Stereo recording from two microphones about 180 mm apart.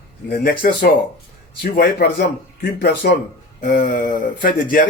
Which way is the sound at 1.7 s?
60° left (ahead or behind).